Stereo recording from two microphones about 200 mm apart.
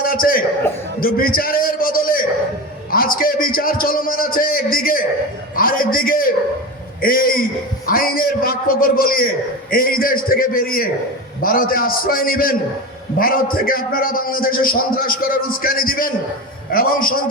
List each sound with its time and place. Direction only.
0.0 s a man's voice: 45° left (ahead or behind)